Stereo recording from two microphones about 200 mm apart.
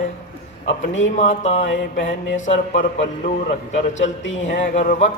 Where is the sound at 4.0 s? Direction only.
70° left (ahead or behind).